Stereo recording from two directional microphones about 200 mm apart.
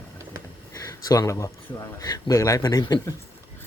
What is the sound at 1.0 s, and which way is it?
Speech, 20° left (ahead or behind).